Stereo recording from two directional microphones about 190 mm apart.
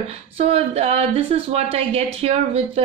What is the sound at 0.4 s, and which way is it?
A woman's voice, 35° right (ahead or behind).